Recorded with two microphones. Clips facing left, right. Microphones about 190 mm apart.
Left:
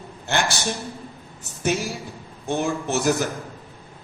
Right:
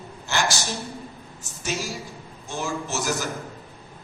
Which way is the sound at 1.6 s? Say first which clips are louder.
Left 6 dB; 60° left (ahead or behind).